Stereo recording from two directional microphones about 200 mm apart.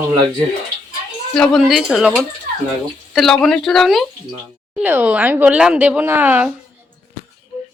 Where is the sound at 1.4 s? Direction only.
Centre (ahead or behind).